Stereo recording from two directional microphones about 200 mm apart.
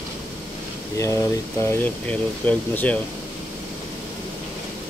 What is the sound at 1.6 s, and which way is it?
Speech, 10° left (ahead or behind).